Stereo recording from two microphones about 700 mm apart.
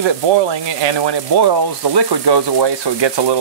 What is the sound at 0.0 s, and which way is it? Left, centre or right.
Speech, right.